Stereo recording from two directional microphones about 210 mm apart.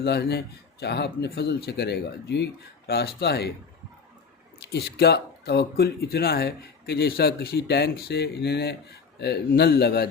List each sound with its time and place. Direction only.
0.0 s speech: 50° left (ahead or behind)
4.6 s speech: 50° left (ahead or behind)